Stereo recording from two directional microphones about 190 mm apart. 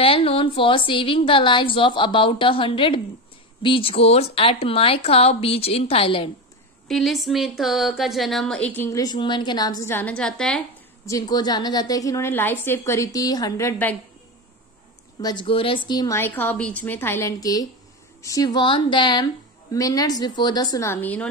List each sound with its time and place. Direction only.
0.0 s a woman's voice: 30° left (ahead or behind)
6.9 s speech: centre (ahead or behind)
11.1 s a woman's voice: 20° left (ahead or behind)
15.1 s a woman's voice: 25° left (ahead or behind)